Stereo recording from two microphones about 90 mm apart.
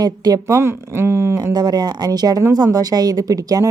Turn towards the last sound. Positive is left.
turn(degrees=-40)  # may be behind; listen again after turning